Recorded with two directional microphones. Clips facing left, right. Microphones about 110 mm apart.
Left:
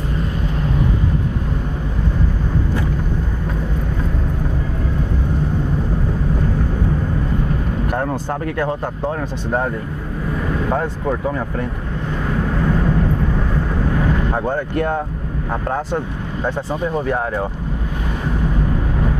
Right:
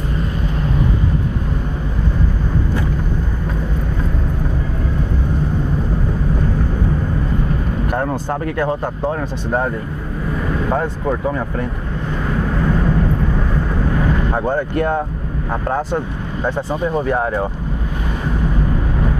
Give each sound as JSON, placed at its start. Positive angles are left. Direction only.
{"t": 7.9, "sound": "speech", "side_deg": -20}
{"t": 12.3, "sound": "vehicle", "side_deg": -25}
{"t": 15.5, "sound": "speech", "side_deg": -20}